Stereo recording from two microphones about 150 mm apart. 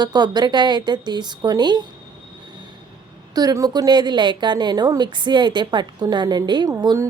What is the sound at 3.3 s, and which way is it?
A woman's voice, 25° right (ahead or behind).